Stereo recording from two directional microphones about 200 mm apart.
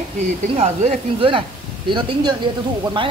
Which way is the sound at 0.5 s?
30° right (ahead or behind).